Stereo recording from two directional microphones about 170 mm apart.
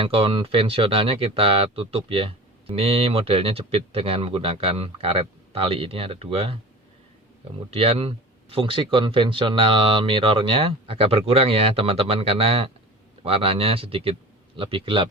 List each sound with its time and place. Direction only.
0.0 s speech: 35° right (ahead or behind)
7.7 s speech: 35° right (ahead or behind)